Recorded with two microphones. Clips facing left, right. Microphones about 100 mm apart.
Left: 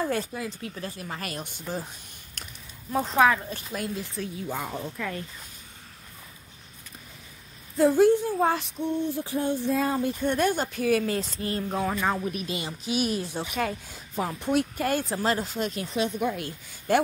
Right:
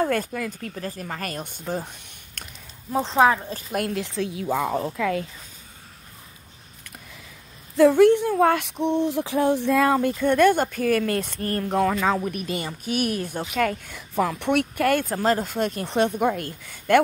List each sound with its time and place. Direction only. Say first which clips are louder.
0.0 s speech: right 5 dB; 55° right (ahead or behind)
2.9 s speech: right 3 dB; 25° right (ahead or behind)
3.7 s a woman's voice: right 7 dB; 65° right (ahead or behind); by 5.2 s 90° right
7.7 s a woman's voice: right 4 dB; 75° right (ahead or behind)
8.8 s a sound: right 6 dB; 85° right; by 10.1 s 70° right (ahead or behind)
10.2 s speech: right 8 dB; 55° right (ahead or behind); by 12.2 s 80° right
12.3 s speech: right 3 dB; 55° right (ahead or behind)